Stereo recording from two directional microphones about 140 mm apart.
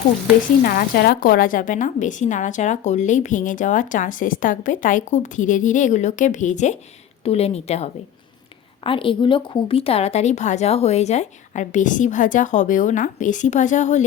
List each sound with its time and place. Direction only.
0.6 s a woman's voice: 90° left; by 6.7 s 60° left (ahead or behind)
7.3 s a woman's voice: 45° left (ahead or behind)
8.8 s a woman's voice: 40° left (ahead or behind); by 14.0 s 60° left (ahead or behind)